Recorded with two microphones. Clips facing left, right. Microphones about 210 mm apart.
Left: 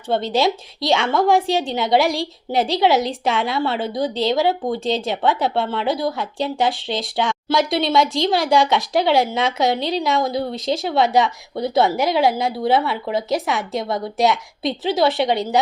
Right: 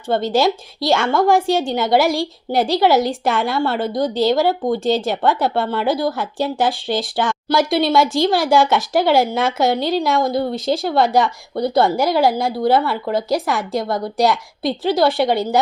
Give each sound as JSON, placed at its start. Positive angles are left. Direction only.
{"t": 0.1, "sound": "a woman's voice", "side_deg": 0}